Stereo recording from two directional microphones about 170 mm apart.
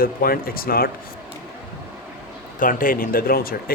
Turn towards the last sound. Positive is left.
turn(degrees=60)  # may be behind; listen again after turning